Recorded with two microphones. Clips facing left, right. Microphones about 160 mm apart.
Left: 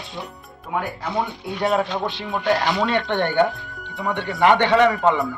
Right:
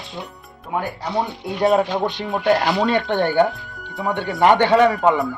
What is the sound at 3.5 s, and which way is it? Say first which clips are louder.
Music: right 1 dB; centre (ahead or behind).